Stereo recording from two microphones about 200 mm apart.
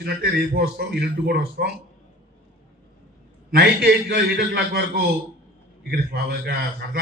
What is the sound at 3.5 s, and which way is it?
A man's voice, 55° right (ahead or behind).